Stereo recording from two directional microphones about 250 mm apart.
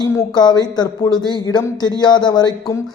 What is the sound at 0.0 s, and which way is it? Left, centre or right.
Speech, centre.